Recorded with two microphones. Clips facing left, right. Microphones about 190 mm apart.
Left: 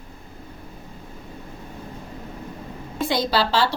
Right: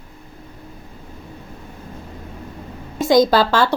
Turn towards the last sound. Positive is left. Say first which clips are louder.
# right 5 dB
turn(degrees=-50)  # may be behind; listen again after turning